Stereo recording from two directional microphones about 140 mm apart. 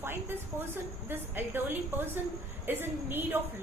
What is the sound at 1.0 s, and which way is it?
A woman's voice, 15° right (ahead or behind).